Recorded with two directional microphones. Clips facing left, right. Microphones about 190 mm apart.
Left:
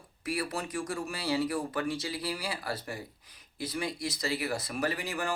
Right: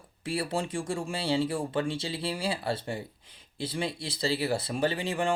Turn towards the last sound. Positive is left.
turn(degrees=-25)  # may be behind; listen again after turning